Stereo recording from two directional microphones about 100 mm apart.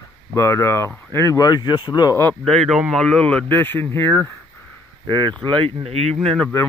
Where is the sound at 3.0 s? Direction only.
10° left (ahead or behind).